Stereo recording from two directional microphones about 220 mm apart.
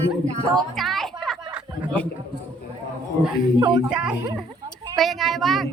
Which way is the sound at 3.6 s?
20° right (ahead or behind).